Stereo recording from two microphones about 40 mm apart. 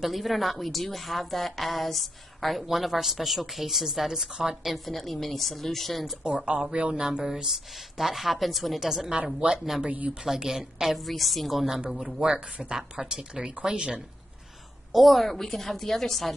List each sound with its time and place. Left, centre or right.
0.0 s a woman's voice: centre
4.7 s a woman's voice: centre
6.2 s a woman's voice: right; by 9.1 s centre
9.1 s speech: right
9.8 s speech: right
10.2 s a woman's voice: centre
12.2 s speech: right
14.9 s a woman's voice: centre